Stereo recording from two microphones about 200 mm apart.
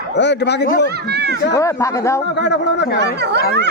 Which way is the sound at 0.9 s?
55° right (ahead or behind).